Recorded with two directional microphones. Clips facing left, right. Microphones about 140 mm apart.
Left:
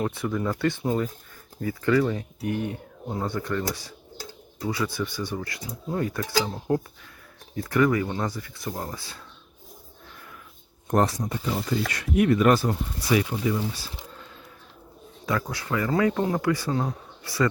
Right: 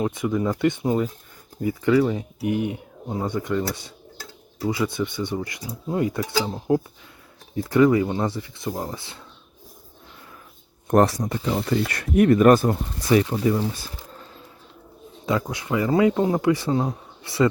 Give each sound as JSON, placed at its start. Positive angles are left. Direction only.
{"t": 0.0, "sound": "speech", "side_deg": -15}
{"t": 4.6, "sound": "speech", "side_deg": -20}
{"t": 7.7, "sound": "speech", "side_deg": -25}
{"t": 10.8, "sound": "speech", "side_deg": -70}
{"t": 11.9, "sound": "speech", "side_deg": -50}
{"t": 15.3, "sound": "speech", "side_deg": -20}